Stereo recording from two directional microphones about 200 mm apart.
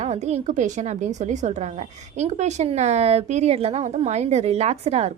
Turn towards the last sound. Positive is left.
turn(degrees=-30)  # may be behind; listen again after turning